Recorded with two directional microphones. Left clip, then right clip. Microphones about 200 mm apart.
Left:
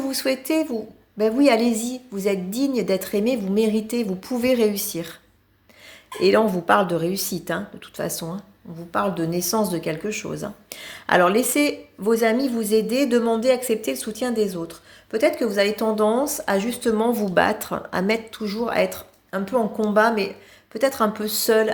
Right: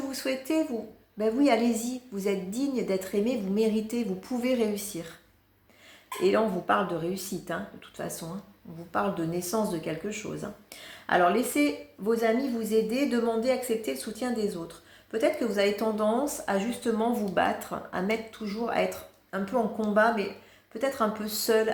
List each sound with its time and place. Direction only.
0.0 s speech: 40° left (ahead or behind)
6.2 s speech: 45° left (ahead or behind)